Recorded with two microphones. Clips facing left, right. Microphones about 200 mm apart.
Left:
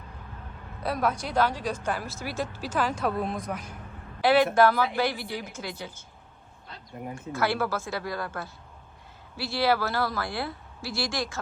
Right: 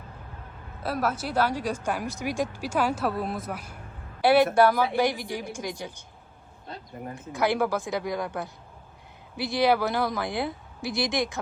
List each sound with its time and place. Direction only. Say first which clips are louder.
0.8 s speech: even; 5° right (ahead or behind)
6.9 s speech: left 2 dB; centre (ahead or behind)
7.3 s speech: right 3 dB; 15° right (ahead or behind)